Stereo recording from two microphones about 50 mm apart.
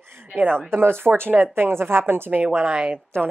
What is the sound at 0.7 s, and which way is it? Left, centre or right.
A woman's voice, right.